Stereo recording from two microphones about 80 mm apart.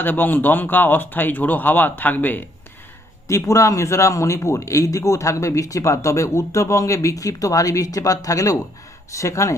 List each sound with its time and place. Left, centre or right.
0.0 s speech: left
3.2 s speech: left